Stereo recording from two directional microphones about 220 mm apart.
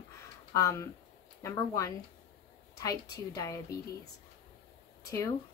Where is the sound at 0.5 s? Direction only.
15° left (ahead or behind).